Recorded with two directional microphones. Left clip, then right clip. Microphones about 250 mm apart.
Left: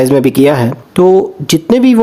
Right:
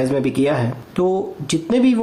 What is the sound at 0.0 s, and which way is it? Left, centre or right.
Speech, left.